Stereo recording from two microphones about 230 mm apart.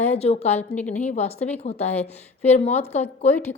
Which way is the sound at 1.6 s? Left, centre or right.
Left.